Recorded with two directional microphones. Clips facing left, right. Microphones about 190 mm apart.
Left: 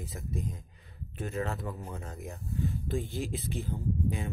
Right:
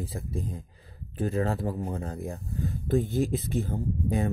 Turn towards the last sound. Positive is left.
turn(degrees=-45)  # may be behind; listen again after turning